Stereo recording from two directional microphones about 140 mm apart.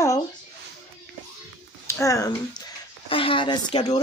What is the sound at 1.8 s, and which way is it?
Speech, 20° left (ahead or behind).